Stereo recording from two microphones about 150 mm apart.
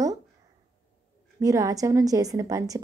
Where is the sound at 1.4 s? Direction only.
20° right (ahead or behind).